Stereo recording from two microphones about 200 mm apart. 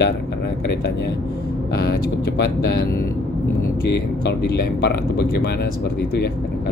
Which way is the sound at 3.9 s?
55° left (ahead or behind).